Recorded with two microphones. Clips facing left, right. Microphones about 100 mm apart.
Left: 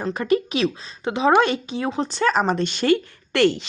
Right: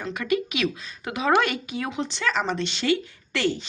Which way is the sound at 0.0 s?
35° left (ahead or behind).